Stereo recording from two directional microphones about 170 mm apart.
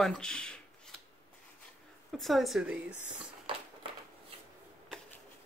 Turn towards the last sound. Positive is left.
turn(degrees=-30)  # may be behind; listen again after turning